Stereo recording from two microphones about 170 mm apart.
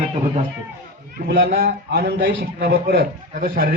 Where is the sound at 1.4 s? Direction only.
60° right (ahead or behind).